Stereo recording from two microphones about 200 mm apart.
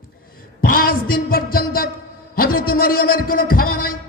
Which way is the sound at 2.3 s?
45° left (ahead or behind).